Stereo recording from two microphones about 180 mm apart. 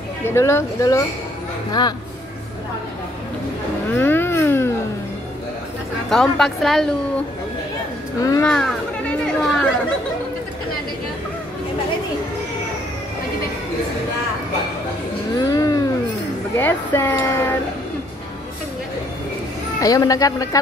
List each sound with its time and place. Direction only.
0.3 s speech: 15° left (ahead or behind)
3.9 s a sound: 10° left (ahead or behind)
6.0 s a woman's voice: 5° left (ahead or behind)
8.2 s speech: 20° left (ahead or behind)
8.5 s a woman's voice: centre (ahead or behind)
9.2 s chatter: 5° left (ahead or behind)
15.4 s a sound: 20° left (ahead or behind)
16.5 s speech: 10° left (ahead or behind)
19.8 s speech: 20° left (ahead or behind)